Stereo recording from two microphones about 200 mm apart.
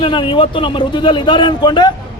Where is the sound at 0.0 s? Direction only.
25° left (ahead or behind).